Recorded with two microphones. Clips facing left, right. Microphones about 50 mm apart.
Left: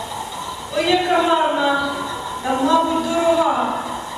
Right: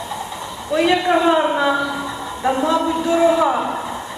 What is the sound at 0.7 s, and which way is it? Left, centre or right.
A woman's voice, right.